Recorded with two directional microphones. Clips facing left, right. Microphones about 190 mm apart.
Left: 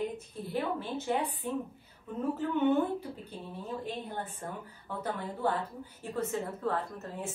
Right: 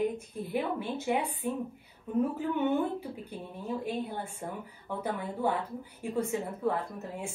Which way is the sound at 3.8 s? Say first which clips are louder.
Right 3 dB; 10° right (ahead or behind).